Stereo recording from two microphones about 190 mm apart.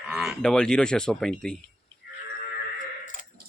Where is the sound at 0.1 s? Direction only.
Centre (ahead or behind).